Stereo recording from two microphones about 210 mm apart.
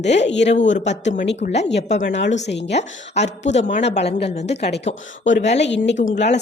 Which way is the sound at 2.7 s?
30° left (ahead or behind).